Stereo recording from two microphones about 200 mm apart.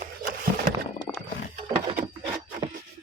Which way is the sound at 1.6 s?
20° right (ahead or behind).